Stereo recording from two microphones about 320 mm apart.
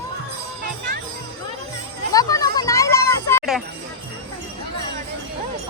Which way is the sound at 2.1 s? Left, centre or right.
Centre.